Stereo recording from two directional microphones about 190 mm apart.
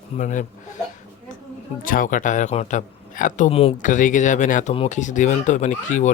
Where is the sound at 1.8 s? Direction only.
45° left (ahead or behind).